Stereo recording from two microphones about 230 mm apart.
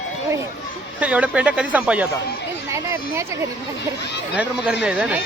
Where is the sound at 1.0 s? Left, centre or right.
Centre.